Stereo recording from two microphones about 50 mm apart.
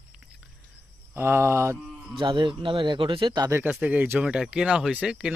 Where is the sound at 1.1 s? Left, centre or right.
Right.